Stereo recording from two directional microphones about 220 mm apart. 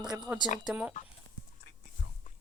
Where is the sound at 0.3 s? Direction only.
10° right (ahead or behind).